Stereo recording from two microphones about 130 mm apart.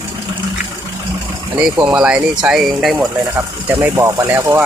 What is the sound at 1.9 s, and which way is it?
Speech, 10° right (ahead or behind).